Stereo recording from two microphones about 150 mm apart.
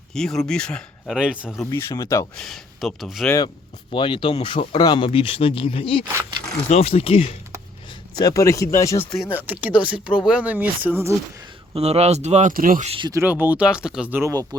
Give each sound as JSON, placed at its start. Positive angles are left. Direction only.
{"t": 0.1, "sound": "speech", "side_deg": 5}
{"t": 1.7, "sound": "speech", "side_deg": 20}
{"t": 2.4, "sound": "speech", "side_deg": 0}
{"t": 3.2, "sound": "speech", "side_deg": 20}
{"t": 3.9, "sound": "speech", "side_deg": 35}
{"t": 8.2, "sound": "speech", "side_deg": 20}
{"t": 9.3, "sound": "speech", "side_deg": -10}
{"t": 11.7, "sound": "speech", "side_deg": -45}
{"t": 12.8, "sound": "speech", "side_deg": -40}
{"t": 13.2, "sound": "speech", "side_deg": -10}